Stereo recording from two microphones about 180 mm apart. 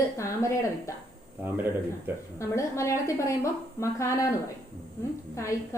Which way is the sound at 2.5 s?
15° left (ahead or behind).